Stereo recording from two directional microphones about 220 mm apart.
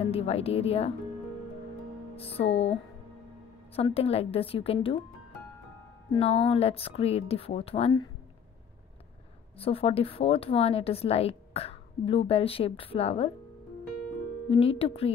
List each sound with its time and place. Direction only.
0.0 s a woman's voice: 25° left (ahead or behind)
2.1 s music: 25° left (ahead or behind)
2.4 s speech: 55° left (ahead or behind)
3.7 s a woman's voice: 25° left (ahead or behind)
6.1 s a woman's voice: 25° left (ahead or behind)
9.6 s a woman's voice: 25° left (ahead or behind)
14.5 s a woman's voice: 25° left (ahead or behind)